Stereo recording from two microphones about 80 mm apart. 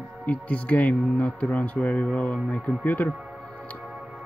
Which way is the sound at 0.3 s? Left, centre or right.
Centre.